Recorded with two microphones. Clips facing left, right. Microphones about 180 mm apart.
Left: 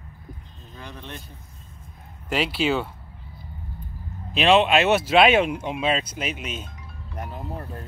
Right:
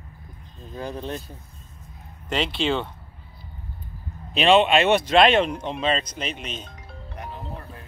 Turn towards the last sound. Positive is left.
turn(degrees=45)  # may be behind; listen again after turning